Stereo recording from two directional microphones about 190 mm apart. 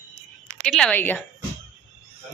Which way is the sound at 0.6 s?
5° left (ahead or behind).